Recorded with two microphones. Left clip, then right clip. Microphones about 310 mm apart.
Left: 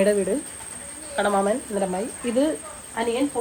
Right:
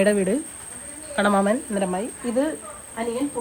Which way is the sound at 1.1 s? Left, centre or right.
Right.